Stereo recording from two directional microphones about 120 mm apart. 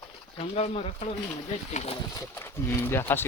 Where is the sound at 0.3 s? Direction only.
60° left (ahead or behind).